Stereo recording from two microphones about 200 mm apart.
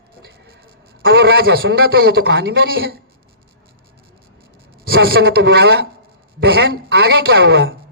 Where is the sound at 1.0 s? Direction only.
55° right (ahead or behind).